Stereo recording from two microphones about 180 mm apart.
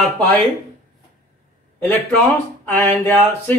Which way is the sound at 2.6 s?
10° left (ahead or behind).